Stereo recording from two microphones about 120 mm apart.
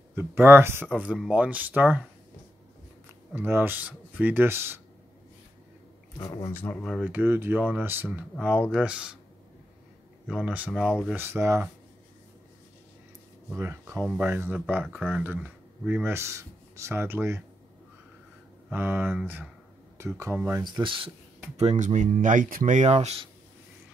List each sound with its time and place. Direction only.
0.1 s speech: 20° right (ahead or behind)
0.9 s speech: 10° right (ahead or behind)
3.3 s speech: 20° right (ahead or behind)
6.1 s a man's voice: 25° left (ahead or behind)
6.5 s speech: 15° left (ahead or behind)
6.8 s speech: 5° left (ahead or behind)
7.1 s speech: 15° right (ahead or behind)
10.2 s speech: 10° right (ahead or behind)
11.1 s speech: 20° right (ahead or behind)
13.6 s speech: 20° right (ahead or behind)
16.1 s speech: 20° right (ahead or behind)
18.7 s speech: 15° right (ahead or behind)
20.6 s speech: 40° right (ahead or behind)
21.5 s speech: 80° right; by 23.2 s 60° right (ahead or behind)